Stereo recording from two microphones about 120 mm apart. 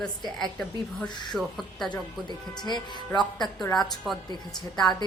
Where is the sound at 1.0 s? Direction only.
40° left (ahead or behind).